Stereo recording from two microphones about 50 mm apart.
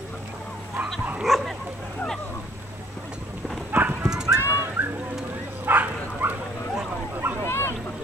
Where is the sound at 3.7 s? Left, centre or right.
Right.